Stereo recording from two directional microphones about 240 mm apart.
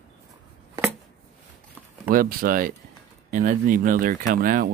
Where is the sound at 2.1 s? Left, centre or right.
Right.